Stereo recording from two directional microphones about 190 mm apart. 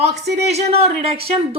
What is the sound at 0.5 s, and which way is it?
A woman's voice, 30° right (ahead or behind).